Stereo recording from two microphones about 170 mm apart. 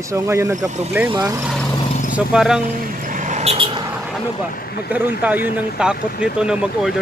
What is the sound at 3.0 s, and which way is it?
Vehicle, 50° right (ahead or behind).